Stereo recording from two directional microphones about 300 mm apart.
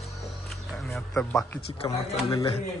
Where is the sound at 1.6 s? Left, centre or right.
Centre.